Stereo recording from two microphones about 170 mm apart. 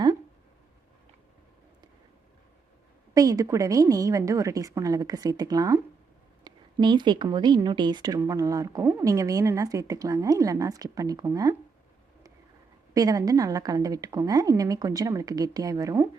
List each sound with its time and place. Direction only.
3.2 s a woman's voice: 20° right (ahead or behind)
12.9 s a woman's voice: 20° right (ahead or behind)